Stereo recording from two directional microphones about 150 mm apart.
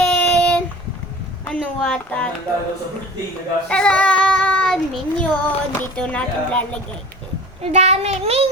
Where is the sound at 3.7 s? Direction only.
5° left (ahead or behind).